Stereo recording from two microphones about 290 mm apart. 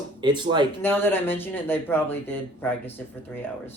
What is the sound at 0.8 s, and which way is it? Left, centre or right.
Speech, centre.